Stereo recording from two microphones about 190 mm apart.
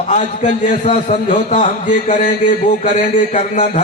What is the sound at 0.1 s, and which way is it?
A man's voice, 45° left (ahead or behind).